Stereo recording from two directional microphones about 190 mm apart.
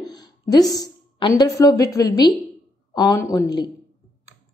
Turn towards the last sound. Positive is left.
turn(degrees=20)  # may be behind; listen again after turning